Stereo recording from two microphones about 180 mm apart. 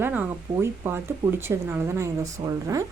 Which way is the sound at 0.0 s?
10° right (ahead or behind).